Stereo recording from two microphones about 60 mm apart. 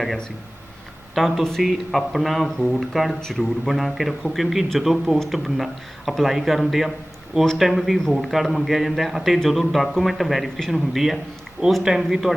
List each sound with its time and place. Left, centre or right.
1.1 s a man's voice: centre